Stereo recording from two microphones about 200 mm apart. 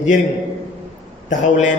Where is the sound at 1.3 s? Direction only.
40° left (ahead or behind).